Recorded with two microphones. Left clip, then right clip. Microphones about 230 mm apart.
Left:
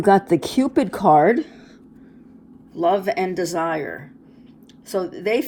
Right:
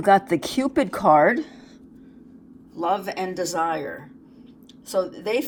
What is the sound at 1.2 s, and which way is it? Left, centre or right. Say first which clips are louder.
Speech: left 2 dB; left.